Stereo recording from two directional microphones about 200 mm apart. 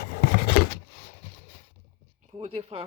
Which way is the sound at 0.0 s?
50° left (ahead or behind).